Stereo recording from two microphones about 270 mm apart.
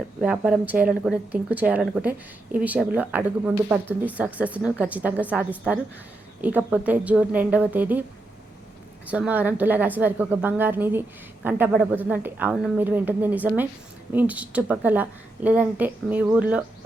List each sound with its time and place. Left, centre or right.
0.2 s speech: centre
9.0 s speech: centre